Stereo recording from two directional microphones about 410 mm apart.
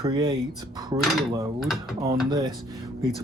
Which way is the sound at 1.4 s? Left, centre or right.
Centre.